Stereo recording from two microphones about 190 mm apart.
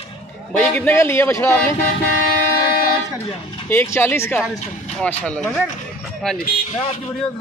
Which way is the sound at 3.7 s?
15° left (ahead or behind).